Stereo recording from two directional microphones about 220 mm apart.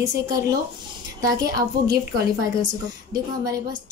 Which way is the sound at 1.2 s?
15° right (ahead or behind).